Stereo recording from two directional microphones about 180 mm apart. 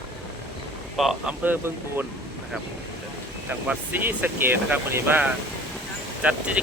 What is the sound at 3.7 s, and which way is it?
Speech, 10° right (ahead or behind).